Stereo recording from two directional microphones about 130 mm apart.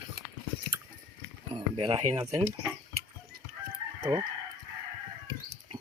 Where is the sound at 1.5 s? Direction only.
40° right (ahead or behind).